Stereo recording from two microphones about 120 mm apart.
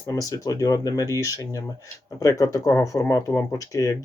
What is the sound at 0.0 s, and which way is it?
Speech, 30° left (ahead or behind).